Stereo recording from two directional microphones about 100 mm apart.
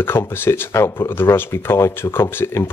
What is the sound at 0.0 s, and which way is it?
Speech, 25° left (ahead or behind).